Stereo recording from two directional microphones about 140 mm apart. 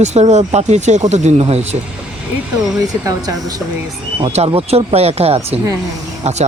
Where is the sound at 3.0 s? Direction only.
25° right (ahead or behind).